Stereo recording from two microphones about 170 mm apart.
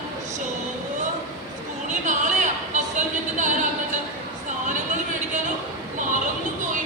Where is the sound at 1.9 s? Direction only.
45° right (ahead or behind).